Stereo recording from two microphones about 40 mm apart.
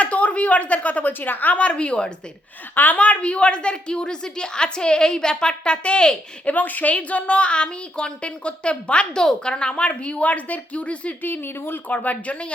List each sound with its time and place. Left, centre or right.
0.0 s a woman's voice: left
1.5 s a woman's voice: left
2.7 s a woman's voice: left
3.0 s a woman's voice: left
6.4 s a woman's voice: left
11.2 s speech: left
11.9 s a woman's voice: left